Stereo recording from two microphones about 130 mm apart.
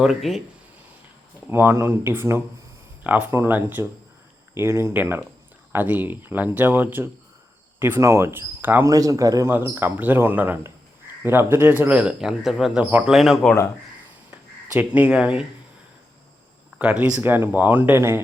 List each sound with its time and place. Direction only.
0.0 s speech: centre (ahead or behind)
1.5 s speech: 15° right (ahead or behind)
8.9 s speech: 25° right (ahead or behind); by 13.6 s centre (ahead or behind)
14.8 s speech: 10° right (ahead or behind)
16.7 s speech: 10° right (ahead or behind)